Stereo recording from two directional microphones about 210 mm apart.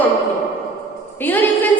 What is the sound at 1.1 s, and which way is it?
Speech, 10° left (ahead or behind).